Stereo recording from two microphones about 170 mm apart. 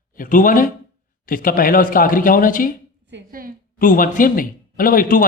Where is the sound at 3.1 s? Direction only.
55° right (ahead or behind).